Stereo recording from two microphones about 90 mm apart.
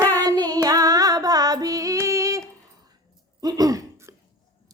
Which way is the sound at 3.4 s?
45° right (ahead or behind).